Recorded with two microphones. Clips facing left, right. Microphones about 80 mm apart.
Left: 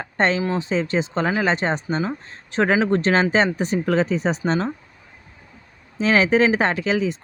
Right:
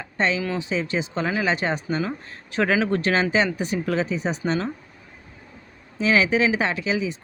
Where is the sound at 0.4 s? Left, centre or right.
Left.